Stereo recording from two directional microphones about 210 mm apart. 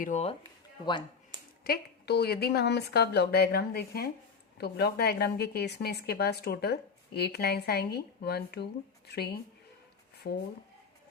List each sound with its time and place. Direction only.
0.0 s speech: 30° left (ahead or behind)
1.6 s speech: 50° left (ahead or behind)